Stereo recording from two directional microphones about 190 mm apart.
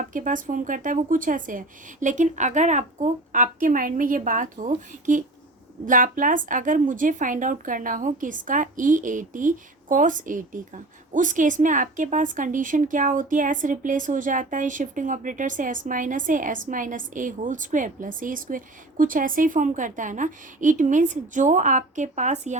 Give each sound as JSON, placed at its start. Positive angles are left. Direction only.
{"t": 0.0, "sound": "a woman's voice", "side_deg": -45}